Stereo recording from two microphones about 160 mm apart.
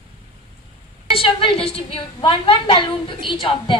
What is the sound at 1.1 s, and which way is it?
A woman's voice, 35° left (ahead or behind).